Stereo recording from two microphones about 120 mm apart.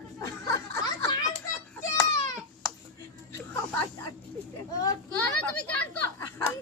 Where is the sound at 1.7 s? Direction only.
25° left (ahead or behind).